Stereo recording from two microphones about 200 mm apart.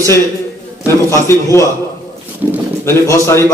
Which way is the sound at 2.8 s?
15° left (ahead or behind).